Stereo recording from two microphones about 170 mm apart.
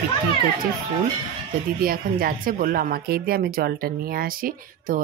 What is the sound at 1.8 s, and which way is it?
Speech, 60° right (ahead or behind).